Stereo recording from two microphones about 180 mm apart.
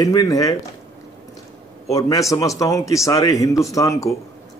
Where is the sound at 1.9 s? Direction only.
20° left (ahead or behind).